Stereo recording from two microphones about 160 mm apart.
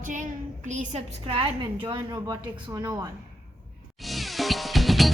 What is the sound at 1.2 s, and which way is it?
A woman's voice, 35° right (ahead or behind).